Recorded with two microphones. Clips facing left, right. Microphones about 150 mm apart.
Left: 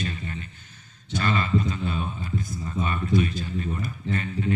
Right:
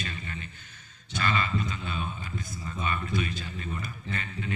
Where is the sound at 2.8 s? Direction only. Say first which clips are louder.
Left 6 dB; 40° left (ahead or behind).